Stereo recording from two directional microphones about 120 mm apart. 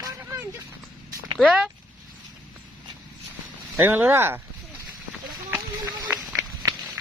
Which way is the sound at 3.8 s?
15° right (ahead or behind).